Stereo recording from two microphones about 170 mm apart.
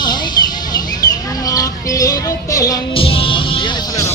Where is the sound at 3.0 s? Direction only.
30° left (ahead or behind).